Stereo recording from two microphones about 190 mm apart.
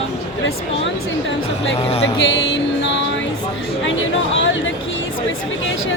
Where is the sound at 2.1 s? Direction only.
75° left (ahead or behind).